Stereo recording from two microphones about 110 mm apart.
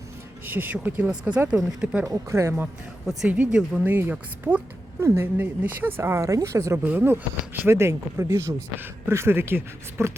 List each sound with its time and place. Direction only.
0.4 s speech: 15° right (ahead or behind)
2.0 s speech: 25° right (ahead or behind)
3.1 s speech: 5° right (ahead or behind)
4.9 s speech: 25° right (ahead or behind)